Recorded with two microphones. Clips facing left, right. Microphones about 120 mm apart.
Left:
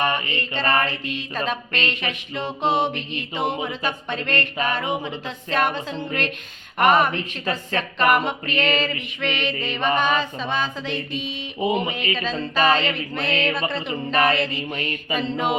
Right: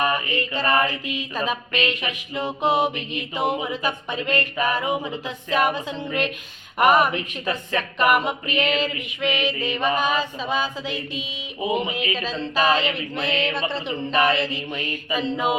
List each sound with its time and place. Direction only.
0.0 s mantra: 5° right (ahead or behind)
7.2 s a woman's voice: 30° left (ahead or behind)
7.9 s music: 5° right (ahead or behind)
13.1 s music: centre (ahead or behind)